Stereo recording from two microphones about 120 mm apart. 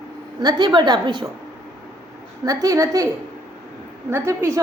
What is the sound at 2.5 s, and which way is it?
Speech, 25° right (ahead or behind).